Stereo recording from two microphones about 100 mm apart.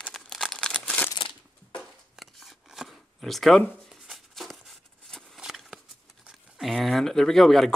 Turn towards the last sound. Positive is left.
turn(degrees=5)  # may be behind; listen again after turning